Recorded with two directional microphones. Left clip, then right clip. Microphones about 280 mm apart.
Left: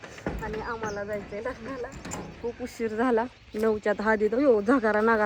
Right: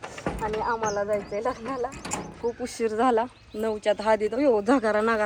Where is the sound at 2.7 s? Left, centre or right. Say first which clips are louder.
Right 3 dB; centre.